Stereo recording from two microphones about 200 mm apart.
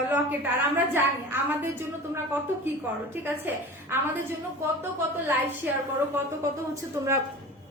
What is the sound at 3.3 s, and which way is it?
Speech, 10° right (ahead or behind).